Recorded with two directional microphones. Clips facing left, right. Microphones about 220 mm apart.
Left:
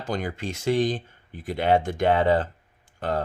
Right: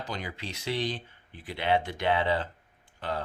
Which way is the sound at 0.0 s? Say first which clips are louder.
Left 8 dB; 50° left (ahead or behind).